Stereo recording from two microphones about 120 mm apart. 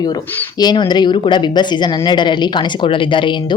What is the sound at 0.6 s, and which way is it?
A woman's voice, 35° left (ahead or behind).